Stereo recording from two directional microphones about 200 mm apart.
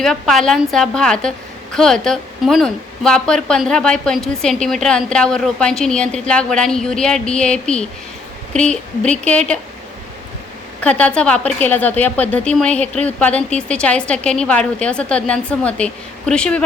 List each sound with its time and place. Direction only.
0.0 s a woman's voice: centre (ahead or behind)
10.8 s a woman's voice: 5° left (ahead or behind)